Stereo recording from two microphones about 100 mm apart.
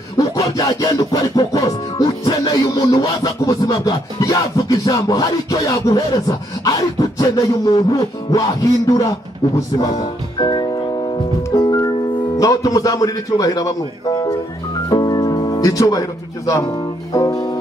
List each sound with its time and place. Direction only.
0.2 s music: 40° left (ahead or behind)
9.8 s speech: 40° left (ahead or behind)
14.9 s music: 45° left (ahead or behind)